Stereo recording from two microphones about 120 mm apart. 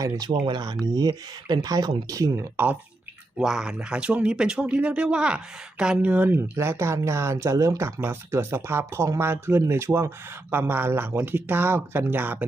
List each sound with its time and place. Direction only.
0.0 s speech: 35° right (ahead or behind)
3.3 s speech: 5° right (ahead or behind)